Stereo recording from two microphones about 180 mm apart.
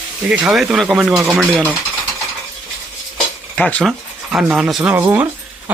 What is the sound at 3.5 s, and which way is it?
Speech, 5° left (ahead or behind).